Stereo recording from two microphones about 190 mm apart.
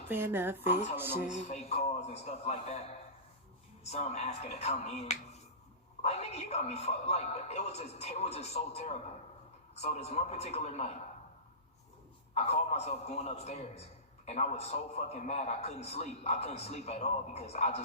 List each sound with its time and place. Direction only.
0.1 s a woman's voice: 10° right (ahead or behind)
1.3 s a man's voice: 35° left (ahead or behind)
3.9 s a man's voice: 35° left (ahead or behind)
12.3 s a man's voice: 35° left (ahead or behind)